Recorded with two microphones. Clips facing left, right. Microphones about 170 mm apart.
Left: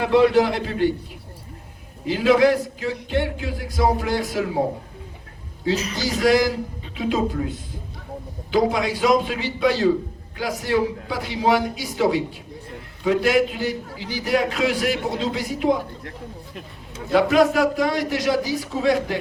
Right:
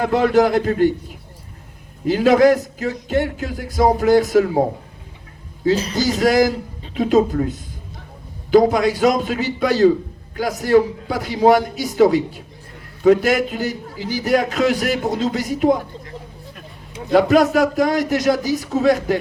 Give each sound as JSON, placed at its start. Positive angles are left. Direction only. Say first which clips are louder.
{"t": 0.0, "sound": "a man's voice", "louder": "right 1 dB", "side_deg": -45}
{"t": 2.0, "sound": "a man's voice", "louder": "right 4 dB", "side_deg": -45}
{"t": 5.7, "sound": "a sound", "louder": "right 4 dB", "side_deg": -35}
{"t": 6.9, "sound": "a man's voice", "louder": "right 7 dB", "side_deg": -45}
{"t": 17.2, "sound": "a man's voice", "louder": "right 3 dB", "side_deg": -40}